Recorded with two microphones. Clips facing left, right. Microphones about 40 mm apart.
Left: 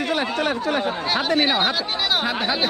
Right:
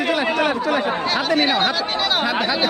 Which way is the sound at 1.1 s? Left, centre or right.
Centre.